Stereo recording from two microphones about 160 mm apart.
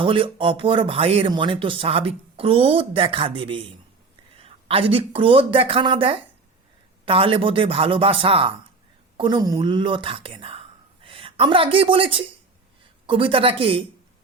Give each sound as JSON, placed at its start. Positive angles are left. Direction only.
{"t": 0.0, "sound": "speech", "side_deg": -35}